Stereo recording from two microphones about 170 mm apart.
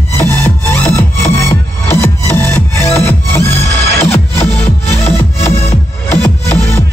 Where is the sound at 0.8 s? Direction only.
15° left (ahead or behind).